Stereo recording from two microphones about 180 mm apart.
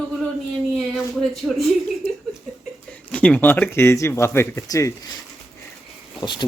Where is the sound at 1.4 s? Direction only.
5° left (ahead or behind).